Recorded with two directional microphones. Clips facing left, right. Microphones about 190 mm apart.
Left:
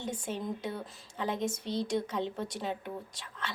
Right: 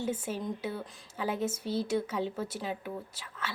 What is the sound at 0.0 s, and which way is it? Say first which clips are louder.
Speech: right 3 dB; 5° right (ahead or behind).